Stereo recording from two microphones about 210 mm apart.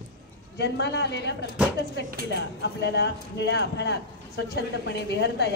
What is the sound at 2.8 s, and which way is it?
A man's voice, 55° left (ahead or behind).